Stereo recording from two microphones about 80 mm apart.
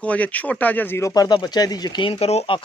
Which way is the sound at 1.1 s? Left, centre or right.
Left.